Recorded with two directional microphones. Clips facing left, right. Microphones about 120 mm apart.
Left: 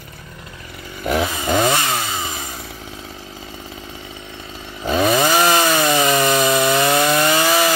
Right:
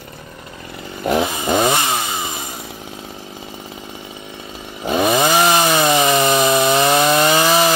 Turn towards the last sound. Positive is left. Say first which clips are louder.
# right 2 dB
turn(degrees=-25)  # may be behind; listen again after turning